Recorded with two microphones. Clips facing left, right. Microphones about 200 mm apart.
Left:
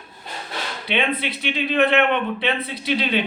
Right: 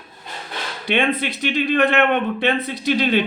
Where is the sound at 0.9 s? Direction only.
45° right (ahead or behind).